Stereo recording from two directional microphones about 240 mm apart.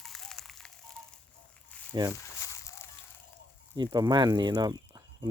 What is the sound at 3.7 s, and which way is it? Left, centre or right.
Speech, centre.